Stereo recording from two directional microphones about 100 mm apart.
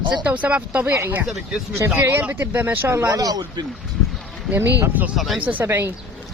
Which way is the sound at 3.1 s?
35° right (ahead or behind).